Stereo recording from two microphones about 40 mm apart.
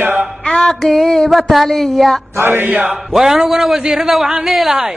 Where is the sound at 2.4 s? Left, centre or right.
Right.